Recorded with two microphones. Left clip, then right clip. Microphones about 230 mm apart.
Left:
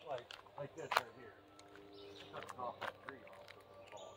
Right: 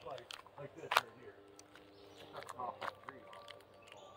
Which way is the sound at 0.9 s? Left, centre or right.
Right.